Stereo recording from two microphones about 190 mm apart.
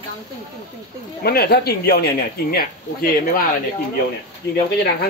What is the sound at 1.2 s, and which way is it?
Speech, 55° left (ahead or behind).